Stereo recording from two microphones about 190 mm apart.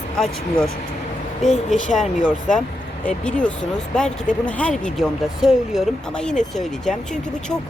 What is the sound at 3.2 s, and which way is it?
Speech, 5° left (ahead or behind).